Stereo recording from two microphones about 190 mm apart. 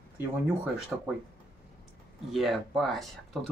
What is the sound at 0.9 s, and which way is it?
Speech, 5° right (ahead or behind).